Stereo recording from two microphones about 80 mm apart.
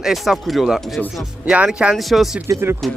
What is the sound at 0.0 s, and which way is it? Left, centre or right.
Speech, centre.